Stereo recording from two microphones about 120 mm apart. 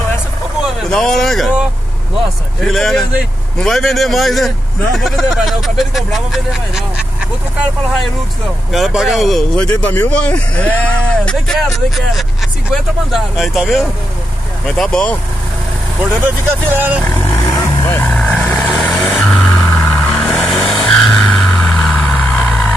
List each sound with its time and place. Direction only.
0.8 s speech: 5° left (ahead or behind)
2.6 s speech: centre (ahead or behind)
8.7 s speech: centre (ahead or behind)
16.0 s speech: 15° right (ahead or behind)
17.8 s vehicle: 20° left (ahead or behind)
18.1 s vehicle: 5° left (ahead or behind)
19.2 s vehicle: 10° left (ahead or behind)